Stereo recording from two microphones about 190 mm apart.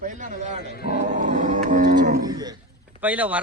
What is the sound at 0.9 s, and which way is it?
Cattle, 40° right (ahead or behind).